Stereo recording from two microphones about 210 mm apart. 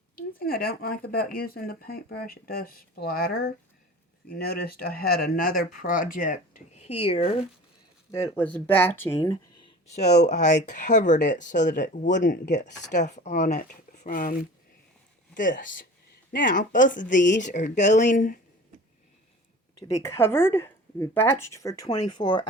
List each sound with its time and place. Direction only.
0.2 s speech: 45° left (ahead or behind); by 7.4 s 30° left (ahead or behind)
8.2 s speech: 10° left (ahead or behind)
9.9 s speech: 35° left (ahead or behind)
15.4 s speech: 40° left (ahead or behind)
19.9 s speech: 15° left (ahead or behind)